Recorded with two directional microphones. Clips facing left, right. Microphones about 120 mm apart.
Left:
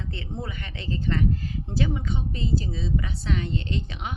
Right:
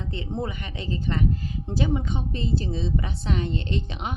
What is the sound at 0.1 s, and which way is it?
A woman's voice, 20° right (ahead or behind).